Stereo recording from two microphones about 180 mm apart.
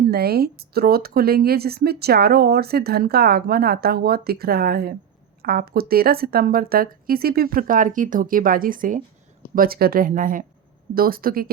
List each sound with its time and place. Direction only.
0.1 s speech: 60° right (ahead or behind)